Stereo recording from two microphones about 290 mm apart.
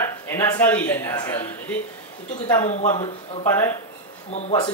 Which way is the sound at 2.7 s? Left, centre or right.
Left.